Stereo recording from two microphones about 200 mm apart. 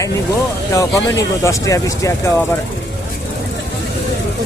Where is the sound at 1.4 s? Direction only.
15° left (ahead or behind).